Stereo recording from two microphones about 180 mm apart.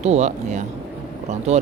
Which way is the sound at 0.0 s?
40° right (ahead or behind).